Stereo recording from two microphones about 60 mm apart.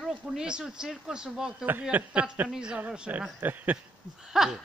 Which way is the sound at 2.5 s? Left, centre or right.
Centre.